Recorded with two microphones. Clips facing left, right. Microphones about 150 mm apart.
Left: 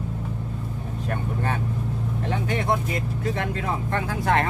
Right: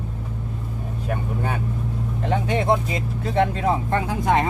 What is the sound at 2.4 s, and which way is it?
Speech, 20° right (ahead or behind).